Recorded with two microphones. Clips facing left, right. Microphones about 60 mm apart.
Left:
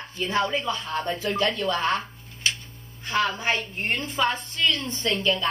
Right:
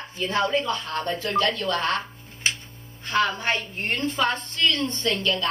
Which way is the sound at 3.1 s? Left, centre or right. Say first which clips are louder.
Right 1 dB; centre.